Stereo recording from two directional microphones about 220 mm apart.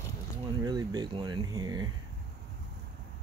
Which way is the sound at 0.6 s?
15° right (ahead or behind).